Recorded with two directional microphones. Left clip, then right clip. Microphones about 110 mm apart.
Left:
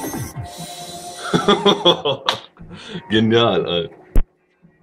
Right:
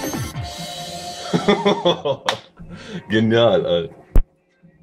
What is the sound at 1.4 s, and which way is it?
Speech, 20° right (ahead or behind).